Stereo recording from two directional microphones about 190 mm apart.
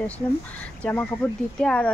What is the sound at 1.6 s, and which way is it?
Speech, 5° left (ahead or behind).